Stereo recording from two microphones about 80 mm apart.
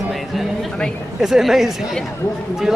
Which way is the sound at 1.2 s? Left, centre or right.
Centre.